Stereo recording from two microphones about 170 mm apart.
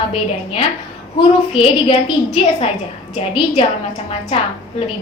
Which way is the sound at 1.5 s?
35° left (ahead or behind).